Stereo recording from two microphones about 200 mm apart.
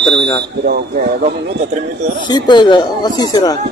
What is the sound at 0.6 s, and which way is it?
Speech, 55° right (ahead or behind).